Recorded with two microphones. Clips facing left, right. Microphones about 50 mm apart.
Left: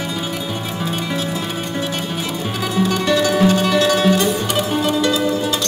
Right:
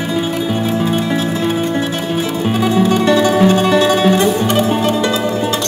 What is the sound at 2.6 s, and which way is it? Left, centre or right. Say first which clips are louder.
Music: right 5 dB; centre.